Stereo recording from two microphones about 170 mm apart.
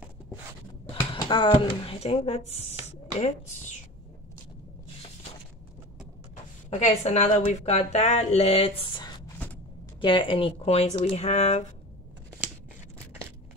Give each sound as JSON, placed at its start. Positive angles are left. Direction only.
{"t": 1.1, "sound": "a woman's voice", "side_deg": 30}
{"t": 6.7, "sound": "a woman's voice", "side_deg": 40}